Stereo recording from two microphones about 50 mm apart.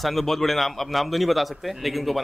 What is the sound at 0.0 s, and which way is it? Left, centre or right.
Speech, centre.